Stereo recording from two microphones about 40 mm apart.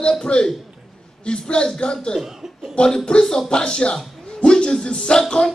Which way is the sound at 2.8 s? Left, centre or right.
Left.